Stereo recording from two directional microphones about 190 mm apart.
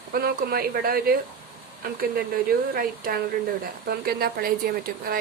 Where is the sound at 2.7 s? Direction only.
50° right (ahead or behind).